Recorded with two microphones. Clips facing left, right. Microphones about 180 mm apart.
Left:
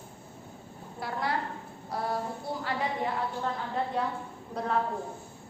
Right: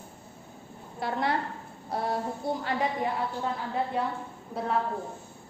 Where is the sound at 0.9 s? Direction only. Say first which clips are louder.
Right 4 dB; 25° right (ahead or behind).